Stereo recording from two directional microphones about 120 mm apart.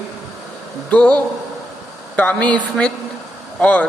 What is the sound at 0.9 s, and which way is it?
Speech, 10° left (ahead or behind).